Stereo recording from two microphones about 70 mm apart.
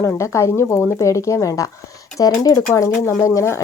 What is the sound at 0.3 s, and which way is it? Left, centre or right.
Speech, left.